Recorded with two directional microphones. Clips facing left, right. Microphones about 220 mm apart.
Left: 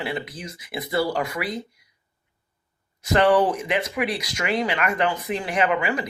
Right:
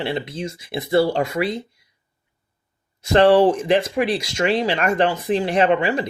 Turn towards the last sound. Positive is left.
turn(degrees=-30)  # may be behind; listen again after turning